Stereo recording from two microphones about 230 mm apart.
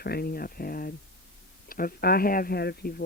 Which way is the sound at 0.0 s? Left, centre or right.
Left.